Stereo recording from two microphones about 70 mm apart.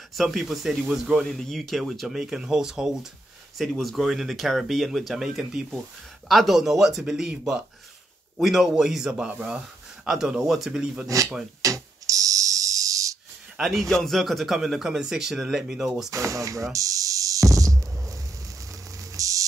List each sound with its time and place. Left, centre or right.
0.1 s a man's voice: centre
1.2 s a man's voice: centre
9.1 s speech: centre
10.0 s a man's voice: centre
11.6 s a sound: right
13.6 s a man's voice: centre
16.1 s speech: right
16.7 s music: right
18.9 s static: right